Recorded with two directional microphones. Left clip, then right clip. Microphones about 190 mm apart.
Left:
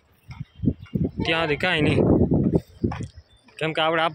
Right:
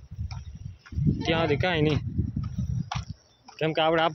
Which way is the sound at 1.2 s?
10° right (ahead or behind).